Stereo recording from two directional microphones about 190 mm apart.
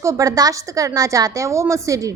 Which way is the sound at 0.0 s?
15° right (ahead or behind).